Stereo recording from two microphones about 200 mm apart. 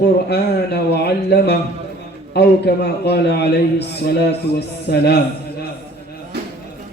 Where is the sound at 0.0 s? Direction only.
55° left (ahead or behind).